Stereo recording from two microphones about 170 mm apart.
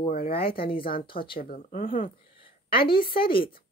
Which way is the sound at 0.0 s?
55° left (ahead or behind).